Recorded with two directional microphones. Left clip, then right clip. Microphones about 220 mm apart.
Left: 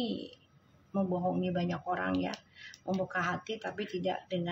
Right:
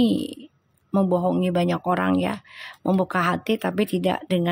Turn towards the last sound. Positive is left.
turn(degrees=-50)  # may be behind; listen again after turning